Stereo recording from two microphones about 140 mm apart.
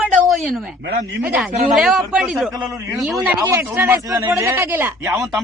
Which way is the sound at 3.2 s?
15° right (ahead or behind).